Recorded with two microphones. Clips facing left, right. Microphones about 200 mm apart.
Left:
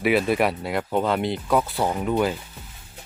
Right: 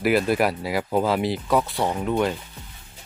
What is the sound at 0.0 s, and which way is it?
Speech, centre (ahead or behind).